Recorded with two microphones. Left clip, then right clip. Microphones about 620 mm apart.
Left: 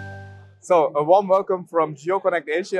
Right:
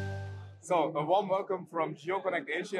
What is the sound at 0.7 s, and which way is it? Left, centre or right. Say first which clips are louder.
Speech: left 12 dB; left.